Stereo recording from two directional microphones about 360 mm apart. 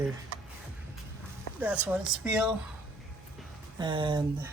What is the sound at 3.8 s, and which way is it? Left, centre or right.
Speech, centre.